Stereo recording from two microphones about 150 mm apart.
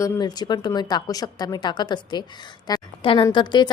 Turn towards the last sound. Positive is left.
turn(degrees=30)  # may be behind; listen again after turning